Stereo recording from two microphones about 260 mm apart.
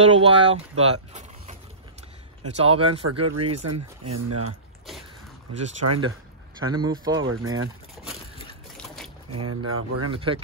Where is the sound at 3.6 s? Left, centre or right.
Right.